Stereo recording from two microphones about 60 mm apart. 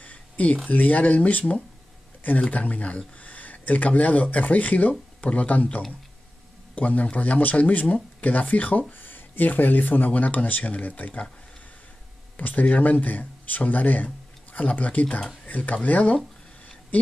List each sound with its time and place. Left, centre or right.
0.0 s a sound: left
0.7 s speech: left
2.5 s speech: left
12.4 s speech: left